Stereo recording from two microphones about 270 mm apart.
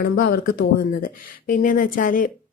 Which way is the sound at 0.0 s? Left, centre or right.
Left.